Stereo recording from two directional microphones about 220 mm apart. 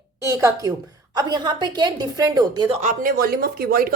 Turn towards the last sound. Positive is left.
turn(degrees=-45)  # may be behind; listen again after turning